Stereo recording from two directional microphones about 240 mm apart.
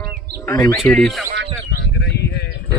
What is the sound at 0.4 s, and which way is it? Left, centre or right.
Speech, centre.